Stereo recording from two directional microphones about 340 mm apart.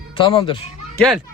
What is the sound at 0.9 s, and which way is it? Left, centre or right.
Speech, centre.